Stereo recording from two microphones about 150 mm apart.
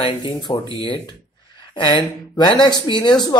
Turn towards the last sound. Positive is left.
turn(degrees=25)  # may be behind; listen again after turning